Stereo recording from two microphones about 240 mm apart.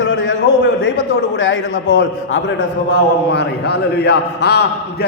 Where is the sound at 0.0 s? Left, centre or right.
Left.